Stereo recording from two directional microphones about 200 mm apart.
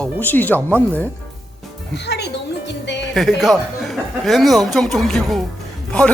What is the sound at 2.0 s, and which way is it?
Music, 55° left (ahead or behind).